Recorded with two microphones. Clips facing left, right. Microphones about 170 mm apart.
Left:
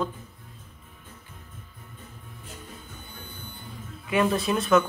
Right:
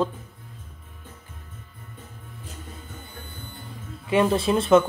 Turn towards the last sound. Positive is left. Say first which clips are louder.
# right 4 dB
turn(degrees=-30)  # may be behind; listen again after turning